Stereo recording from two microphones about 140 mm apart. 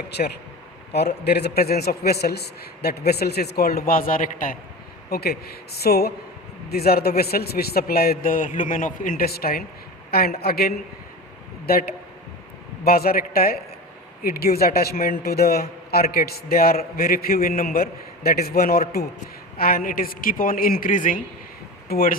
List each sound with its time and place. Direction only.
1.5 s a woman's voice: 90° left; by 4.5 s 75° left (ahead or behind)
5.0 s a woman's voice: 90° left; by 21.2 s 70° left (ahead or behind)
21.8 s speech: 90° left